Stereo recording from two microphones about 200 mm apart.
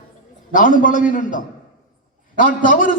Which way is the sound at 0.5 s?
40° left (ahead or behind).